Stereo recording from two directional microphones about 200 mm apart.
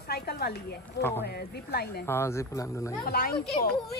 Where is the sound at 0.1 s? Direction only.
50° left (ahead or behind).